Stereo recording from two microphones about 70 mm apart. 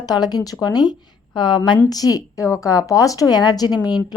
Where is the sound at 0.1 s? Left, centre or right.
Left.